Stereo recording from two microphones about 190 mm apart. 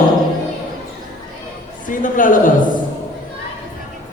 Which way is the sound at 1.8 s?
45° left (ahead or behind).